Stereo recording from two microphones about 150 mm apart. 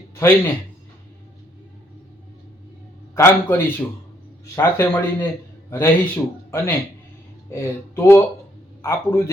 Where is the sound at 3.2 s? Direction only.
15° left (ahead or behind).